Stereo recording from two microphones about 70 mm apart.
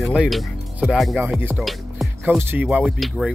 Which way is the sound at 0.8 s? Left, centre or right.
Centre.